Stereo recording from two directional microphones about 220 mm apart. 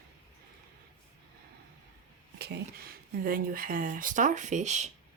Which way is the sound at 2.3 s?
45° right (ahead or behind).